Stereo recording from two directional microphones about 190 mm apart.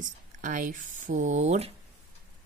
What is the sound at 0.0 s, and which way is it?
Speech, 45° right (ahead or behind).